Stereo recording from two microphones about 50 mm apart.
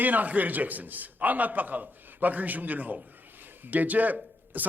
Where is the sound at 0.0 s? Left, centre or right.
Right.